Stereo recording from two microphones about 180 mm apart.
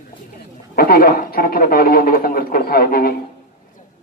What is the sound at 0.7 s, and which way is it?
Speech, 55° left (ahead or behind).